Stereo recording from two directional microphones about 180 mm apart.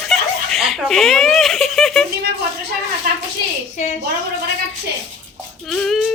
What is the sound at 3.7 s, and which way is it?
Speech, 40° left (ahead or behind).